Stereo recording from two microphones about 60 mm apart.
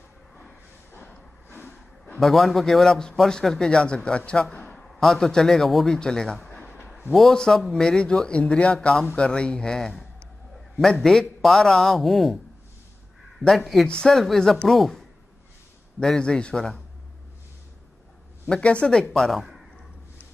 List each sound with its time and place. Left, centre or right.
0.9 s vehicle: left
1.5 s a sound: left
2.1 s a man's voice: centre
13.4 s speech: centre
14.1 s a man's voice: centre
18.5 s speech: centre
19.1 s a man's voice: centre